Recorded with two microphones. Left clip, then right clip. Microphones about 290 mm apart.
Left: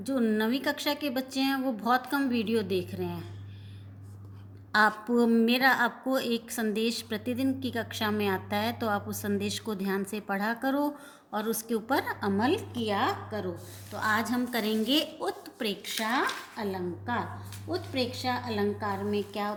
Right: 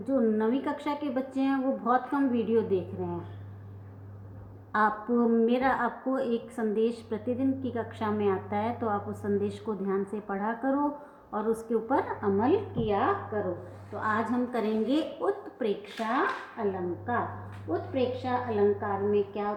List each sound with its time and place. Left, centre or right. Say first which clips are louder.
0.1 s a woman's voice: right 2 dB; left
4.7 s a woman's voice: left 2 dB; left
17.7 s a woman's voice: right 3 dB; left